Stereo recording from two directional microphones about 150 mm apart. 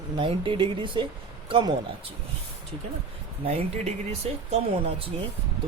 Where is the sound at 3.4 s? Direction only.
45° right (ahead or behind).